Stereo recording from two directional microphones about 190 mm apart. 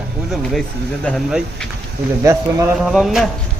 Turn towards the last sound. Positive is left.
turn(degrees=0)  # may be behind; listen again after turning